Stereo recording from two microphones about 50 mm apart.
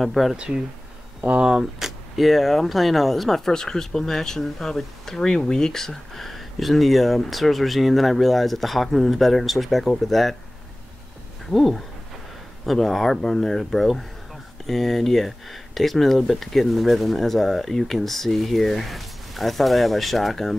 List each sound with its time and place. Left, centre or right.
0.0 s speech: centre
1.2 s speech: right
1.5 s speech: centre
11.5 s speech: centre